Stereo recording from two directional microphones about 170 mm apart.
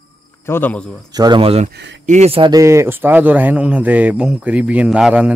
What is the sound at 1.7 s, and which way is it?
Speech, 85° right.